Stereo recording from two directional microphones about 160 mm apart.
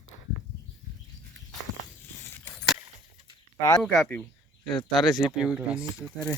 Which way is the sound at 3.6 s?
20° left (ahead or behind).